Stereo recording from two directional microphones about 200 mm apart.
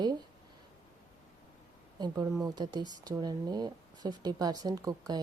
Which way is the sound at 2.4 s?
20° right (ahead or behind).